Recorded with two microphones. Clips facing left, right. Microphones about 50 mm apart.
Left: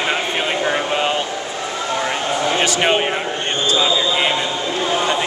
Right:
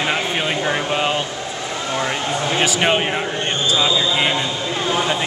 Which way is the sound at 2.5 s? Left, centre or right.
Centre.